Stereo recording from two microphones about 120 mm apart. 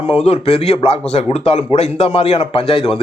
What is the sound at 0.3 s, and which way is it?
A man's voice, 60° left (ahead or behind).